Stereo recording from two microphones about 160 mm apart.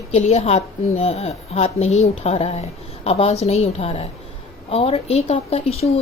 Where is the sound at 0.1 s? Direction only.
45° left (ahead or behind).